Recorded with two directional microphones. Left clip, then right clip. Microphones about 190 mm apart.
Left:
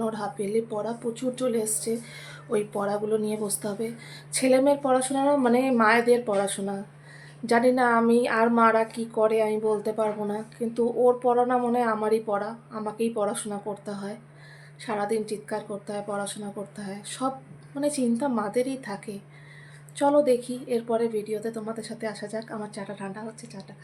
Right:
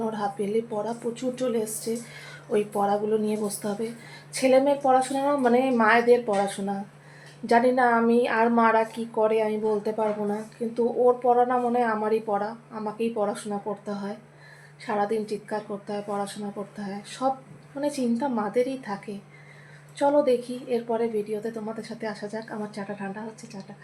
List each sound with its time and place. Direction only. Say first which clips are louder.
0.1 s a woman's voice: right 1 dB; 15° left (ahead or behind)